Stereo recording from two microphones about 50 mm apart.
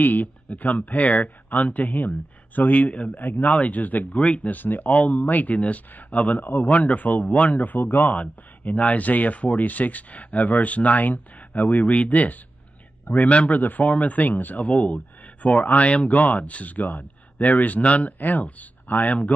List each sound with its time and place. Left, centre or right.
0.0 s a man's voice: left